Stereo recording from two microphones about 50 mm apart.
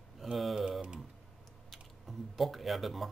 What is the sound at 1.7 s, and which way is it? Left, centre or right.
Speech, centre.